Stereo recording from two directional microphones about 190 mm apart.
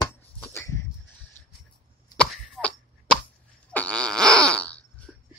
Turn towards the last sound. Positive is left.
turn(degrees=0)  # may be behind; listen again after turning